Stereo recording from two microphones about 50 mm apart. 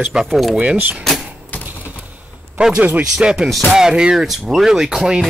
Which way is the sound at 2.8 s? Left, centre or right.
Right.